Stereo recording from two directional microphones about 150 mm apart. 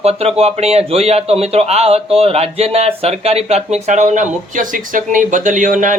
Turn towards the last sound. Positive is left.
turn(degrees=-60)  # may be behind; listen again after turning